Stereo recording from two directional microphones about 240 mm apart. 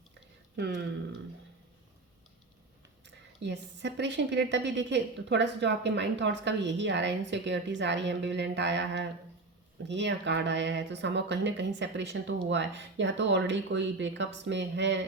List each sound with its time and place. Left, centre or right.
3.4 s a woman's voice: right